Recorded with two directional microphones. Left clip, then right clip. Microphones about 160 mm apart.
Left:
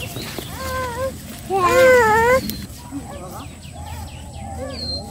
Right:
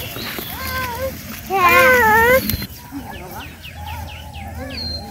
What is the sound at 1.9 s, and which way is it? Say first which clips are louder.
Baby cry: right 1 dB; 90° left.